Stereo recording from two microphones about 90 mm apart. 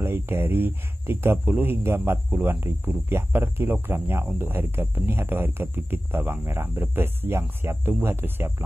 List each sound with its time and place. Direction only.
0.0 s speech: 25° right (ahead or behind)